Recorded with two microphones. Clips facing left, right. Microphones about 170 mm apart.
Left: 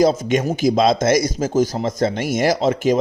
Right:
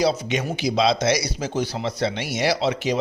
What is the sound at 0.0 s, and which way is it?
Speech, 45° left (ahead or behind).